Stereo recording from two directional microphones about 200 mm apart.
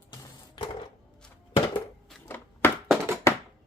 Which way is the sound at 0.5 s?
25° left (ahead or behind).